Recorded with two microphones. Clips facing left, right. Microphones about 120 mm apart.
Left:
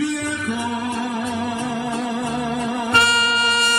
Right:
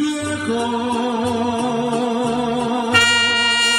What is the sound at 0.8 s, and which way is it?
Music, 60° right (ahead or behind).